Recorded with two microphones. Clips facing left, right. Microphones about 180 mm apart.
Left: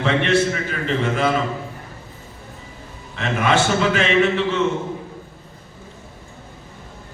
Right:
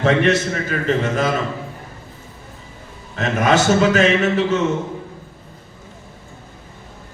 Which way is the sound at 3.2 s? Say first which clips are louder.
Right 2 dB; 40° right (ahead or behind).